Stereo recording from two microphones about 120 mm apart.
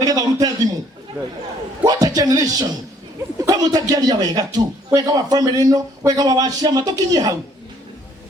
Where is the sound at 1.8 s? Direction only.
30° right (ahead or behind).